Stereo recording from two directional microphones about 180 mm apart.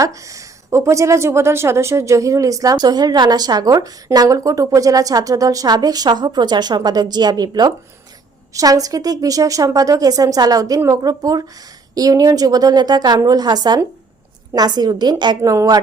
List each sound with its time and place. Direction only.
0.0 s speech: 15° right (ahead or behind)